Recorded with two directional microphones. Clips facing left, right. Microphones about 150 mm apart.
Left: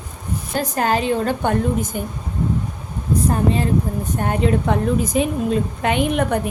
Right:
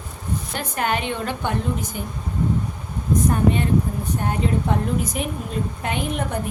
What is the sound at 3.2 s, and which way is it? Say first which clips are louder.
Speech: left 1 dB; 30° left (ahead or behind).